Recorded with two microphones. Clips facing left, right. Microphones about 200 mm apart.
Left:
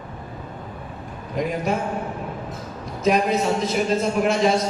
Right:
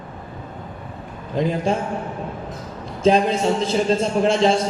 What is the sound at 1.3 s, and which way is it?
Speech, 30° right (ahead or behind).